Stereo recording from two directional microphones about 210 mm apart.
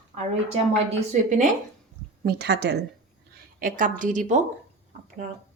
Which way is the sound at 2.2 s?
50° right (ahead or behind).